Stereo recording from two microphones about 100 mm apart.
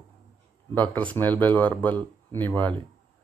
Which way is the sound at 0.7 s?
15° left (ahead or behind).